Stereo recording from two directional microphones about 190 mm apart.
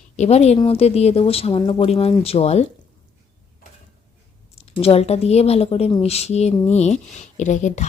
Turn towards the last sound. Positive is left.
turn(degrees=40)  # may be behind; listen again after turning